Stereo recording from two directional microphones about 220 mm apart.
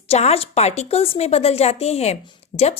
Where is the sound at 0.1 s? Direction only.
30° left (ahead or behind).